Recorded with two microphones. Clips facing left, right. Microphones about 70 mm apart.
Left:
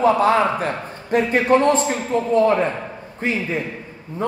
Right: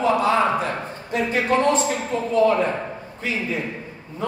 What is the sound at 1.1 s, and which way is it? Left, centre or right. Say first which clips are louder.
Speech: left 5 dB; left.